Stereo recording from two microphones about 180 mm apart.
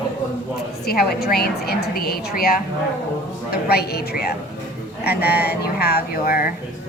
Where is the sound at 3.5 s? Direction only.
60° left (ahead or behind).